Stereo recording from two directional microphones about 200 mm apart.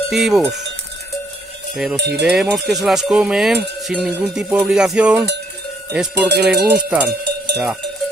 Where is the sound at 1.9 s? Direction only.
60° right (ahead or behind).